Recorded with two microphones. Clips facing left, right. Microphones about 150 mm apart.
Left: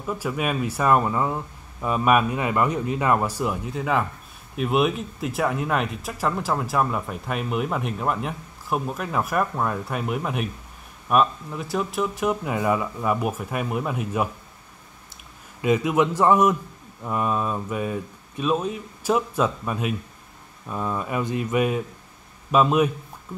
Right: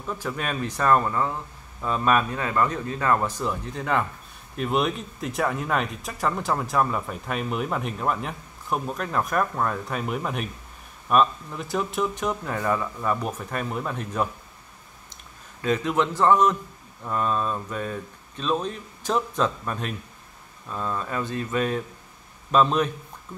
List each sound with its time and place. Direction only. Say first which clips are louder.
0.0 s speech: left 4 dB; 10° left (ahead or behind)
15.6 s speech: left 3 dB; 10° left (ahead or behind)